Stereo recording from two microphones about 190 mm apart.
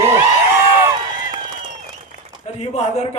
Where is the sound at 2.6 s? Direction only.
35° left (ahead or behind).